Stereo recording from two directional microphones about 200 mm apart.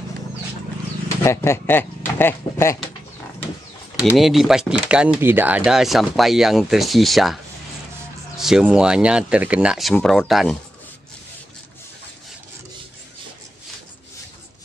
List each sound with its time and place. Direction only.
1.2 s speech: 15° left (ahead or behind)
3.9 s speech: centre (ahead or behind)
8.4 s speech: centre (ahead or behind)